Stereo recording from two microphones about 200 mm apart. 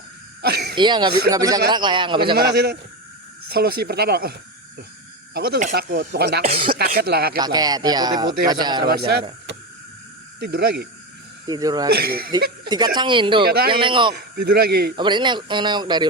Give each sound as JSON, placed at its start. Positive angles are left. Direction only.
{"t": 0.4, "sound": "a sound", "side_deg": -50}
{"t": 0.8, "sound": "speech", "side_deg": -20}
{"t": 2.3, "sound": "speech", "side_deg": -50}
{"t": 7.3, "sound": "speech", "side_deg": -20}
{"t": 8.9, "sound": "speech", "side_deg": -50}
{"t": 10.4, "sound": "speech", "side_deg": -50}
{"t": 11.4, "sound": "speech", "side_deg": -20}
{"t": 11.9, "sound": "speech", "side_deg": -50}
{"t": 12.3, "sound": "speech", "side_deg": -20}
{"t": 14.3, "sound": "speech", "side_deg": -50}
{"t": 14.9, "sound": "speech", "side_deg": -20}